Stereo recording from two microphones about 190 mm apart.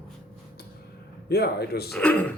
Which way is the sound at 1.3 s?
55° left (ahead or behind).